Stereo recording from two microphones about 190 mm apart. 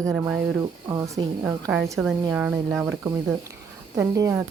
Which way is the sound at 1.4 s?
10° right (ahead or behind).